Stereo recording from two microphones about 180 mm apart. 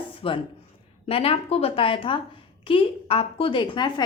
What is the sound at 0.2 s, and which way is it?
A woman's voice, 30° left (ahead or behind).